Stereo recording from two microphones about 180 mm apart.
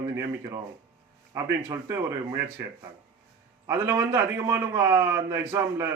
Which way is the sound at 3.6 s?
15° right (ahead or behind).